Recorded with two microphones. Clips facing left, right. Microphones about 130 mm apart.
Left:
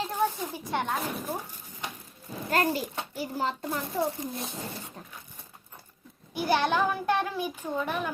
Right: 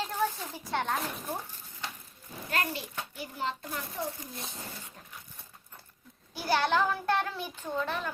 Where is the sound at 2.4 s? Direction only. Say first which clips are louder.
Left 7 dB; 40° left (ahead or behind).